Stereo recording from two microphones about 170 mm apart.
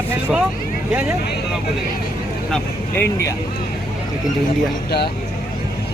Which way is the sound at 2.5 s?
15° left (ahead or behind).